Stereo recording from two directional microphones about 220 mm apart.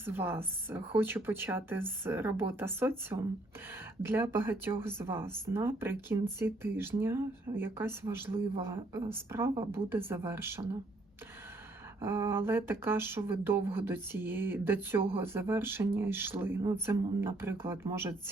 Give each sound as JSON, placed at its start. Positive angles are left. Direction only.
{"t": 0.0, "sound": "speech", "side_deg": -10}
{"t": 12.0, "sound": "speech", "side_deg": -10}